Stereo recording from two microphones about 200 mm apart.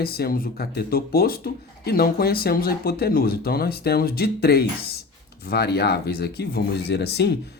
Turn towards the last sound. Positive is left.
turn(degrees=55)  # may be behind; listen again after turning